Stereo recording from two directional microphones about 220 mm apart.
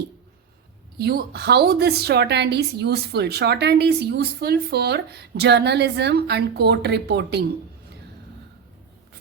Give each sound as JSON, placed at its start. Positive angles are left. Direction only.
{"t": 0.9, "sound": "a woman's voice", "side_deg": -45}